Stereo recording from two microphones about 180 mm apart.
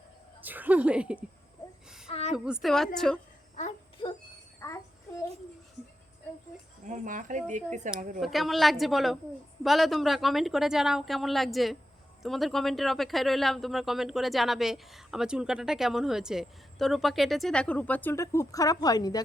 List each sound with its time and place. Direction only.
0.4 s speech: 10° right (ahead or behind)
2.0 s a woman's voice: 35° left (ahead or behind)
2.3 s speech: 5° right (ahead or behind)
4.0 s a sound: 25° left (ahead or behind)
4.6 s child singing: 15° left (ahead or behind)
6.8 s speech: 45° right (ahead or behind)
8.2 s speech: centre (ahead or behind); by 19.2 s 20° left (ahead or behind)